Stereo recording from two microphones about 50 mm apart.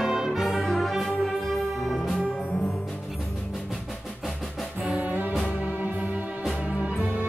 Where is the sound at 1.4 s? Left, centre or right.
Centre.